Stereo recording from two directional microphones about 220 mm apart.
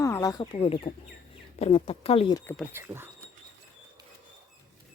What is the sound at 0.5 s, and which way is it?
Speech, 25° left (ahead or behind).